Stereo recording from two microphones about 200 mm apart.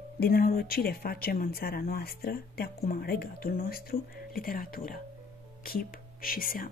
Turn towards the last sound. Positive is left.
turn(degrees=45)  # may be behind; listen again after turning